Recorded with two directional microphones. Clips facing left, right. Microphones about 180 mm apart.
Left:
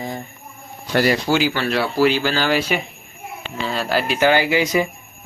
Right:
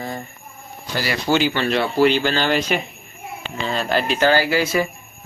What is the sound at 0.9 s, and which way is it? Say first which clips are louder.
Speech: left 8 dB; 60° left (ahead or behind).